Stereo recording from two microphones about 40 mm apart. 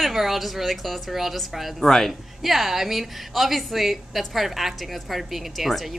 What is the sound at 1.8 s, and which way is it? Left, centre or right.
Speech, centre.